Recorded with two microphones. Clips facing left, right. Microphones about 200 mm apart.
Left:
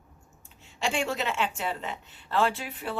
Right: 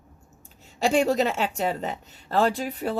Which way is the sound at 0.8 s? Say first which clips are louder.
Right 8 dB; 40° right (ahead or behind).